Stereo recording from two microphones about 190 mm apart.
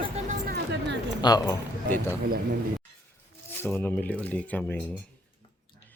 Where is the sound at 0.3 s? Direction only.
55° right (ahead or behind).